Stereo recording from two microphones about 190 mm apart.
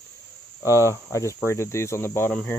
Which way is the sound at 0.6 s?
15° left (ahead or behind).